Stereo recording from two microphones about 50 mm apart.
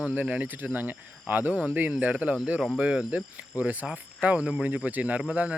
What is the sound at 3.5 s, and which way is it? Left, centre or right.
Speech, right.